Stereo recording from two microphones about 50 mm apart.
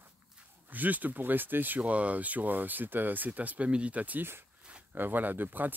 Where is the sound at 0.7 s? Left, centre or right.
Right.